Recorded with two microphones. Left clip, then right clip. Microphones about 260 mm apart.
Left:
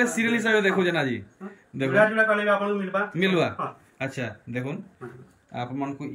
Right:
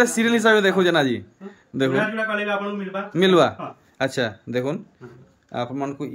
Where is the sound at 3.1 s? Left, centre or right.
Centre.